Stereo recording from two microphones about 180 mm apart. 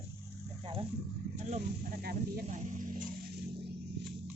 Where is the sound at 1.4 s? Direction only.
40° right (ahead or behind).